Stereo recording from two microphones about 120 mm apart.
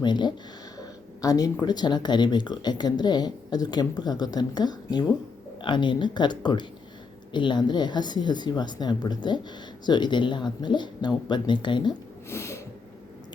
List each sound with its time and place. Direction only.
0.0 s speech: 40° left (ahead or behind)
12.3 s sniff: 20° left (ahead or behind)